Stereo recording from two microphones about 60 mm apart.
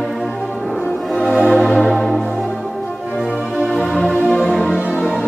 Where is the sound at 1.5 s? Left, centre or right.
Centre.